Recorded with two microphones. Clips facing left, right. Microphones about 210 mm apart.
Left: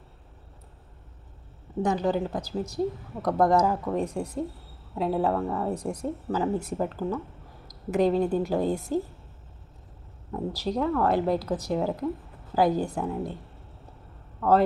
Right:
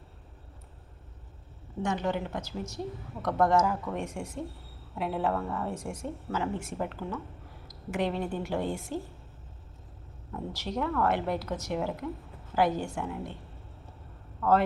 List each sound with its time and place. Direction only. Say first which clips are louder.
1.8 s a woman's voice: left 5 dB; 35° left (ahead or behind)
10.3 s a woman's voice: left 5 dB; 35° left (ahead or behind)